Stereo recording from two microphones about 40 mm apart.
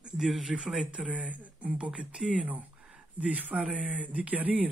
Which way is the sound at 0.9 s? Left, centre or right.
Right.